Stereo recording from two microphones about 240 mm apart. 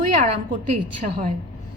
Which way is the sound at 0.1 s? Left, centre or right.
Right.